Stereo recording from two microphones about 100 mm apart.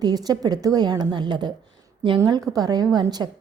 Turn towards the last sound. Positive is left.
turn(degrees=-45)  # may be behind; listen again after turning